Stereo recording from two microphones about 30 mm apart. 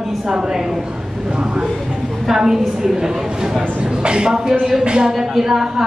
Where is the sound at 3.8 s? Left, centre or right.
Right.